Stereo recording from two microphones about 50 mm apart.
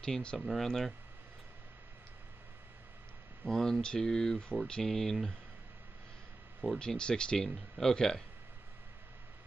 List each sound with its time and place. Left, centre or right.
0.0 s speech: centre
0.4 s speech: centre
3.4 s speech: centre
6.8 s speech: centre